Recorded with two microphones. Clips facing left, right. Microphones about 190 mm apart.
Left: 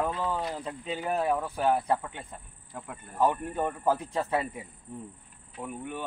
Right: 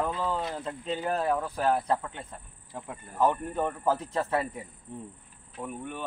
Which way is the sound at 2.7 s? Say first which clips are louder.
Right 1 dB; 20° right (ahead or behind).